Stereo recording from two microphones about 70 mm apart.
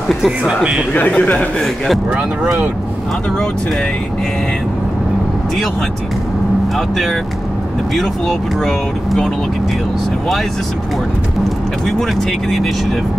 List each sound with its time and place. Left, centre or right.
0.9 s a man's voice: left
7.9 s speech: centre
12.0 s speech: centre